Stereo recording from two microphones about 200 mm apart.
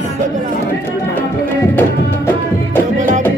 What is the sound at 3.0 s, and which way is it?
Music, 40° right (ahead or behind).